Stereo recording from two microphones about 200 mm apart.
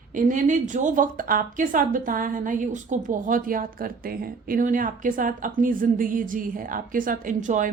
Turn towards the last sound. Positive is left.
turn(degrees=-40)  # may be behind; listen again after turning